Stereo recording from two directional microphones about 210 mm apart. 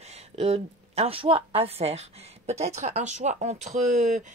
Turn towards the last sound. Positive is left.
turn(degrees=-35)  # may be behind; listen again after turning